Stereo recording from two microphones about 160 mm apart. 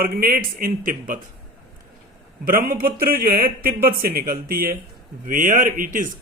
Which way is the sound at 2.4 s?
65° right (ahead or behind).